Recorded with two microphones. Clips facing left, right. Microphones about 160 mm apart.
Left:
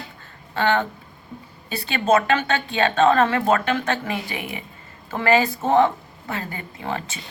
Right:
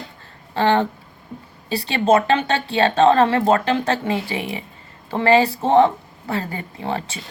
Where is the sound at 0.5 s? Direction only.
30° right (ahead or behind).